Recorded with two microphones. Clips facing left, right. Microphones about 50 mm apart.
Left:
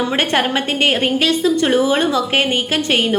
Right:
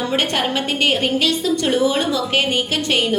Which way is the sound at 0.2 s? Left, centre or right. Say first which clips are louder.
Left 3 dB; left.